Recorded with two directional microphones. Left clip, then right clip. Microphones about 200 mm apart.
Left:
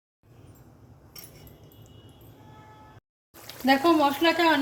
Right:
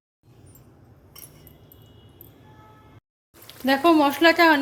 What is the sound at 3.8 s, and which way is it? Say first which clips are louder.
Speech: right 8 dB; 25° right (ahead or behind).